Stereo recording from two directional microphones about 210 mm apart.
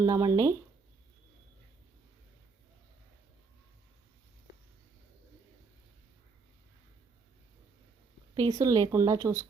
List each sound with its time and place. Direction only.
0.0 s speech: 15° right (ahead or behind)
8.4 s speech: 15° right (ahead or behind)